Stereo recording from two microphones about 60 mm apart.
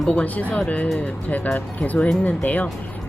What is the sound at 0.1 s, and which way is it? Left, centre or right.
Speech, left.